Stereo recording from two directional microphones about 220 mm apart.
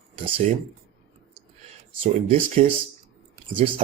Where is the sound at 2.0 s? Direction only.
30° right (ahead or behind).